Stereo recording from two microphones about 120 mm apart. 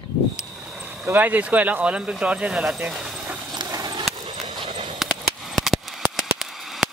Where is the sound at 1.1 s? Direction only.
15° right (ahead or behind).